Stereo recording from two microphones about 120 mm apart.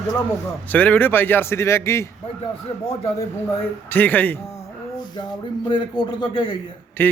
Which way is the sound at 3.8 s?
15° left (ahead or behind).